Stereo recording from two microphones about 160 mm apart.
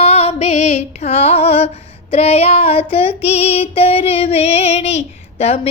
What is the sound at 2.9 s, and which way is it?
Female singing, 35° left (ahead or behind).